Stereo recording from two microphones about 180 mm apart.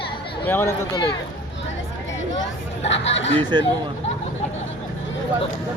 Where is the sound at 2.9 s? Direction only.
90° left.